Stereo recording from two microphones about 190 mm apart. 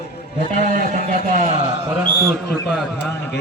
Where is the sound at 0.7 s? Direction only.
45° right (ahead or behind).